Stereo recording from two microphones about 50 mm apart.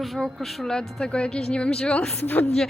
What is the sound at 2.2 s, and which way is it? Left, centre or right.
Speech, left.